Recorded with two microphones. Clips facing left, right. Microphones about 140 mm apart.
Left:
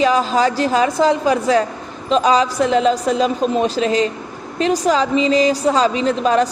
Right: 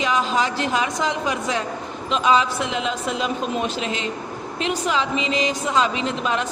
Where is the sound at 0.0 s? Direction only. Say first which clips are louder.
Left 6 dB; 35° left (ahead or behind).